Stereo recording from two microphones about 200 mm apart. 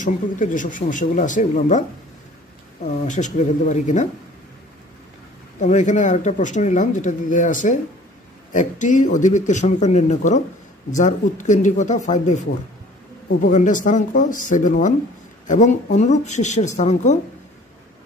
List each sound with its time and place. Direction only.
0.0 s speech: 40° left (ahead or behind)
3.1 s speech: 35° left (ahead or behind)
5.6 s speech: 35° left (ahead or behind)